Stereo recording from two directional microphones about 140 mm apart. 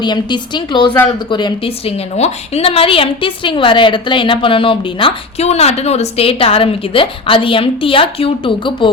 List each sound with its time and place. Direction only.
0.0 s a woman's voice: 30° left (ahead or behind)